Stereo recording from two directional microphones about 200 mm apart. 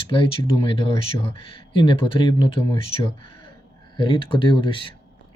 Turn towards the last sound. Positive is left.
turn(degrees=25)  # may be behind; listen again after turning